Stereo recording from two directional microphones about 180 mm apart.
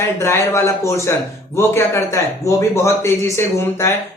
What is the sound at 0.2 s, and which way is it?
Speech, 15° left (ahead or behind).